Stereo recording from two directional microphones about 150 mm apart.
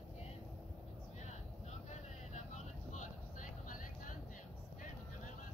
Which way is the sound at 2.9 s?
55° left (ahead or behind).